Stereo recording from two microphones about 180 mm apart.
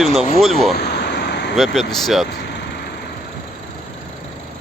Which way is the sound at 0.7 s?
65° left (ahead or behind).